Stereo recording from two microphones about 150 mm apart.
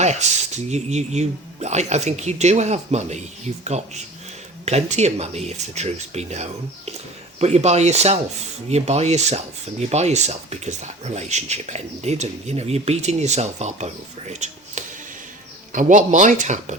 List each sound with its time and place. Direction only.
0.0 s speech: 50° right (ahead or behind)